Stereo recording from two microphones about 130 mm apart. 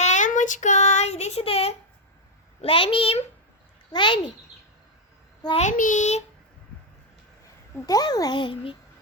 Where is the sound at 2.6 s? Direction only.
45° left (ahead or behind).